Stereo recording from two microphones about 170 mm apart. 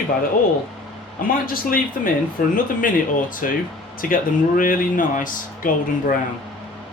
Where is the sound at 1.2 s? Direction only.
55° left (ahead or behind).